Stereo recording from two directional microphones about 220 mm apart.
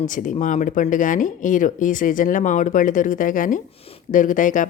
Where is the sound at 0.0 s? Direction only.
35° left (ahead or behind).